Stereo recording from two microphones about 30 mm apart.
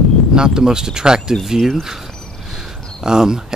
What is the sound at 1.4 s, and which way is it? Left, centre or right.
Speech, centre.